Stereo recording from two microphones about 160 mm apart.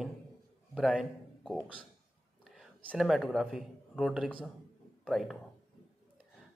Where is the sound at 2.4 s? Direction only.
Centre (ahead or behind).